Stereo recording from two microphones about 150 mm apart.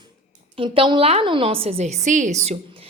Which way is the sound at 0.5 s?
35° right (ahead or behind).